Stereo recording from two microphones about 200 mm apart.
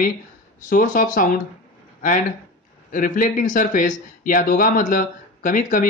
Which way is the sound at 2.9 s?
40° left (ahead or behind).